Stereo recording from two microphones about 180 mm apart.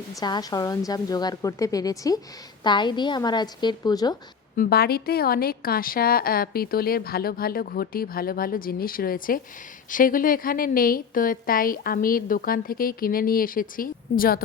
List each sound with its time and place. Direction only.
0.2 s a woman's voice: 20° left (ahead or behind)
4.5 s a woman's voice: 55° left (ahead or behind)